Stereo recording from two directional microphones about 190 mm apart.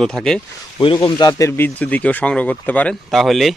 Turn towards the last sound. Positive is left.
turn(degrees=0)  # may be behind; listen again after turning